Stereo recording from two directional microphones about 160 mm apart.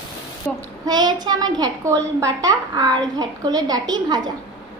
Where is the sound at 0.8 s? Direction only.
25° right (ahead or behind).